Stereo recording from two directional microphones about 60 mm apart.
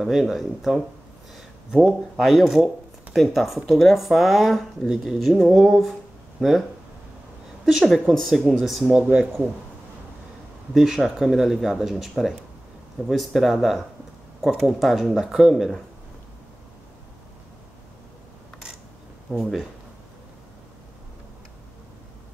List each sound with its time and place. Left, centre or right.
0.0 s speech: centre
1.9 s speech: centre
6.4 s speech: centre
7.6 s speech: centre
8.9 s speech: centre
10.7 s speech: centre
19.3 s speech: centre